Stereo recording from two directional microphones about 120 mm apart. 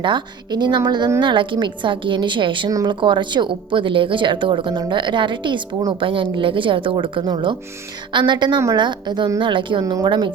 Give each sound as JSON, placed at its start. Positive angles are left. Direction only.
{"t": 0.0, "sound": "a woman's voice", "side_deg": -40}